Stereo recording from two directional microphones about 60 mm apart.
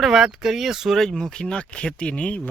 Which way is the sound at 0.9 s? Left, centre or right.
Centre.